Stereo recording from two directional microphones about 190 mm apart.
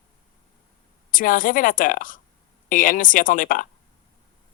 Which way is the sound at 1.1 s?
45° left (ahead or behind).